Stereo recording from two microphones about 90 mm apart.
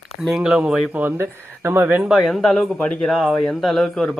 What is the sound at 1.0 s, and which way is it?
Speech, 25° right (ahead or behind).